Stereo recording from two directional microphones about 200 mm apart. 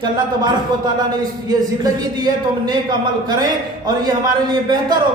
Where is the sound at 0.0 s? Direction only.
20° right (ahead or behind).